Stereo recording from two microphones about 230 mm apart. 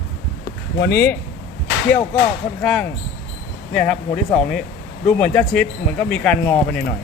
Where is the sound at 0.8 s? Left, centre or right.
Left.